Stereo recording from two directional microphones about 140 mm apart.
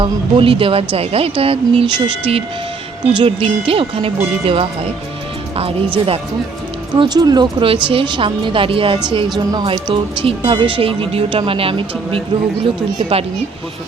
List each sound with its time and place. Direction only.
0.0 s speech: 40° right (ahead or behind)
6.9 s speech: 30° right (ahead or behind)